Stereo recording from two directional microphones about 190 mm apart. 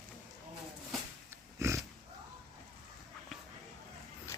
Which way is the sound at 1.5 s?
15° right (ahead or behind).